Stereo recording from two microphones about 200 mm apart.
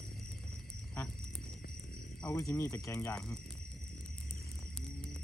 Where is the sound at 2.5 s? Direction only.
10° left (ahead or behind).